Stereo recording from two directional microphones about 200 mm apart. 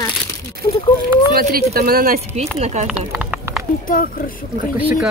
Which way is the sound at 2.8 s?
5° right (ahead or behind).